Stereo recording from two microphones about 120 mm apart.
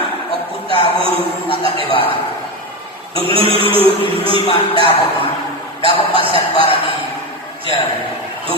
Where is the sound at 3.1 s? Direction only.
50° right (ahead or behind).